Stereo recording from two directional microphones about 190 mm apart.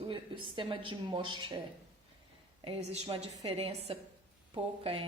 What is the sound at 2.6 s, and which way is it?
A woman's voice, 35° right (ahead or behind).